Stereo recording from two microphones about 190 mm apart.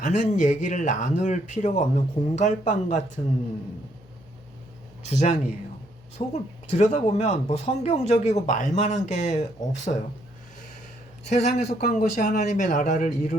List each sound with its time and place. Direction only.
0.0 s speech: 40° left (ahead or behind)
5.0 s speech: 35° left (ahead or behind)
11.3 s speech: 40° left (ahead or behind)